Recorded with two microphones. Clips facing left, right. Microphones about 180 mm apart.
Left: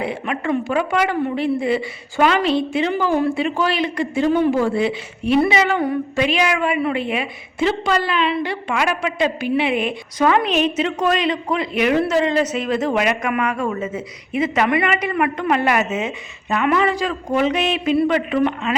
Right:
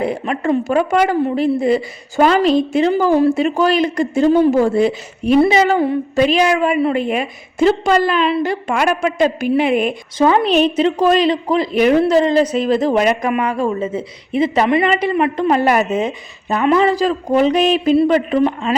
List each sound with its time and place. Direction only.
0.0 s a woman's voice: 40° right (ahead or behind)
10.2 s a woman's voice: 30° right (ahead or behind)